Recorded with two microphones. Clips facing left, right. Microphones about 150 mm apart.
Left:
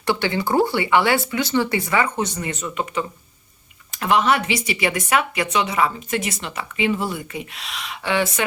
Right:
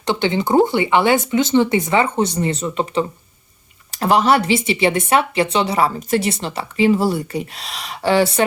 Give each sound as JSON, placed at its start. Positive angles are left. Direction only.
{"t": 0.0, "sound": "speech", "side_deg": -20}